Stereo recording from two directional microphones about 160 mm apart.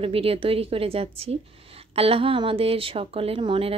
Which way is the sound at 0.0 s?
35° right (ahead or behind).